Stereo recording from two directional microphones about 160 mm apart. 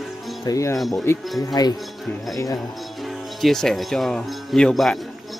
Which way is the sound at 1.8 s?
Centre (ahead or behind).